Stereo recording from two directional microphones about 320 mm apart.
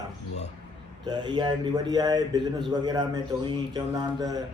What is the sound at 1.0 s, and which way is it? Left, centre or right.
Speech, centre.